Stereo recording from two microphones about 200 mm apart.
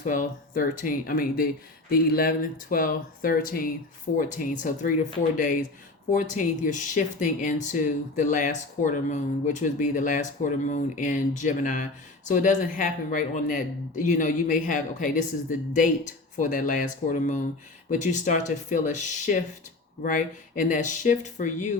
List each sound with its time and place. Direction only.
0.0 s speech: 40° left (ahead or behind)
6.1 s speech: 40° left (ahead or behind)